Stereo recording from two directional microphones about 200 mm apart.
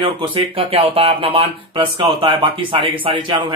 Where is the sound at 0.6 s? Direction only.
30° right (ahead or behind).